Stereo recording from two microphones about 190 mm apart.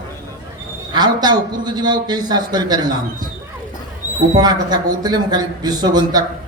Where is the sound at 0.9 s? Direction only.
20° right (ahead or behind).